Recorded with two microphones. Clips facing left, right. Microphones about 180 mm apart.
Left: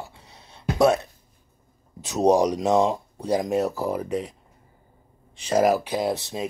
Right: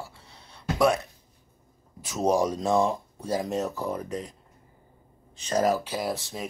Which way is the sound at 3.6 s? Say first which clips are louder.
Left 5 dB; 35° left (ahead or behind).